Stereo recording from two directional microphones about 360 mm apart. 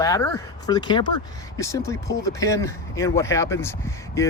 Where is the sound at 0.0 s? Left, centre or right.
Centre.